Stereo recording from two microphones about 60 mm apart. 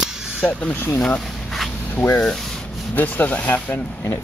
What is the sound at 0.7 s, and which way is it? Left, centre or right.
Speech, left.